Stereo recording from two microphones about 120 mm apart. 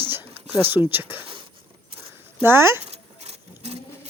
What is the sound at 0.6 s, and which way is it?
Speech, 15° right (ahead or behind).